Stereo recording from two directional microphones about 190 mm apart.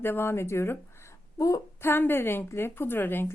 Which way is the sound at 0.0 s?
10° left (ahead or behind).